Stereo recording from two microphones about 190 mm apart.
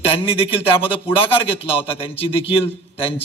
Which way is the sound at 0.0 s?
30° left (ahead or behind).